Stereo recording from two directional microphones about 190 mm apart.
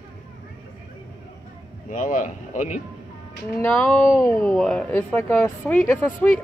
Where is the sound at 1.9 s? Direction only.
45° left (ahead or behind).